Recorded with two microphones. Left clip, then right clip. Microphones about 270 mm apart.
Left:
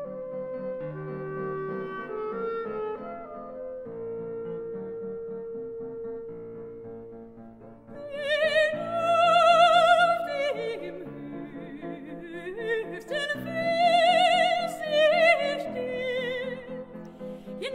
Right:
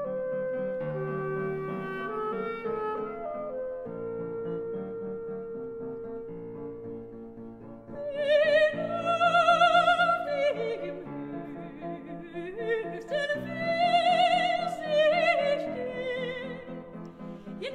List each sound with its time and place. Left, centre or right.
8.0 s music: left
12.5 s music: left